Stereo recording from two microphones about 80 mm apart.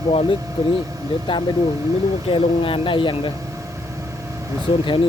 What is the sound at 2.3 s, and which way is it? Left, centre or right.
Speech, left.